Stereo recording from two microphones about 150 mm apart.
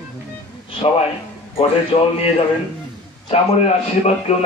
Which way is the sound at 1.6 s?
40° left (ahead or behind).